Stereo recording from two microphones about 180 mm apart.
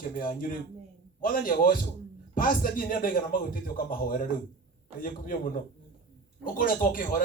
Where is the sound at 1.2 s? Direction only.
50° left (ahead or behind).